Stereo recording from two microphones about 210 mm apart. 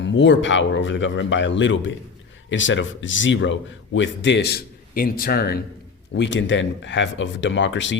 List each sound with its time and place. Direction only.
0.0 s a man's voice: 60° left (ahead or behind)
6.1 s a man's voice: 60° left (ahead or behind)